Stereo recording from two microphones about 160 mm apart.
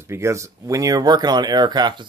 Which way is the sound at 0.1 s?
15° right (ahead or behind).